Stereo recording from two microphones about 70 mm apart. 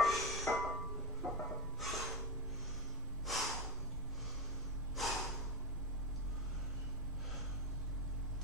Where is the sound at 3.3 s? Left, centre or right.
Centre.